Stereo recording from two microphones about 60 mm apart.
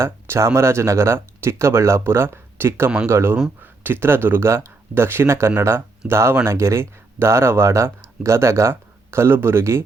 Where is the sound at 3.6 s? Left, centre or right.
Right.